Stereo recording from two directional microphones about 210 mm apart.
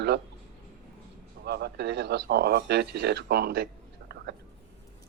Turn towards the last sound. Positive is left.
turn(degrees=-50)  # may be behind; listen again after turning